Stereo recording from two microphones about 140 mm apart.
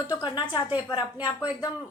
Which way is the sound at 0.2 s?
35° left (ahead or behind).